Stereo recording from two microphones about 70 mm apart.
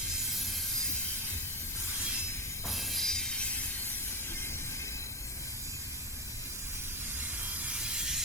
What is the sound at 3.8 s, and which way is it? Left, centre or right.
Train, left.